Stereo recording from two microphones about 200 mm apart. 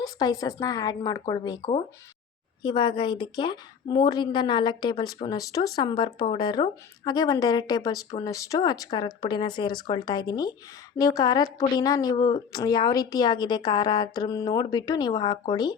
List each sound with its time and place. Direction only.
0.0 s a woman's voice: 20° left (ahead or behind)